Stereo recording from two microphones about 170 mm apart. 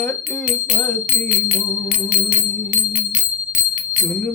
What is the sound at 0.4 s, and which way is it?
Music, 45° left (ahead or behind).